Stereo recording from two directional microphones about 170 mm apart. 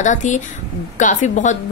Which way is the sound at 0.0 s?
45° left (ahead or behind).